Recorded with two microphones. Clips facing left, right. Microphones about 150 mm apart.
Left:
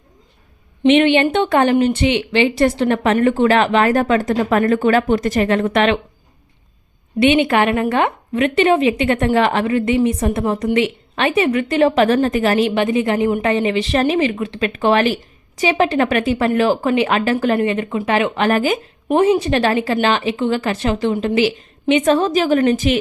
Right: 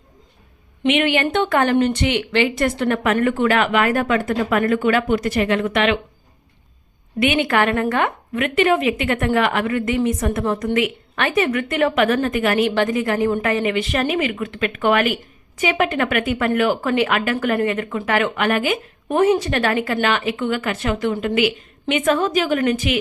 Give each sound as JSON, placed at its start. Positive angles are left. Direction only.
{"t": 0.9, "sound": "a woman's voice", "side_deg": 30}
{"t": 7.2, "sound": "speech", "side_deg": 25}
{"t": 13.5, "sound": "speech", "side_deg": 30}
{"t": 19.0, "sound": "speech", "side_deg": 20}